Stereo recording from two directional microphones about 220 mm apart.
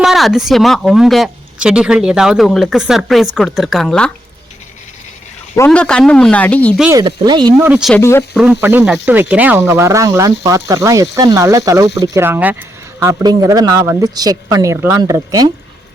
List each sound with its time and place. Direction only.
0.0 s speech: centre (ahead or behind)
5.5 s speech: 5° left (ahead or behind)
7.0 s speech: 20° right (ahead or behind)
7.7 s speech: centre (ahead or behind)
7.9 s speech: 10° left (ahead or behind)
8.3 s speech: 5° right (ahead or behind)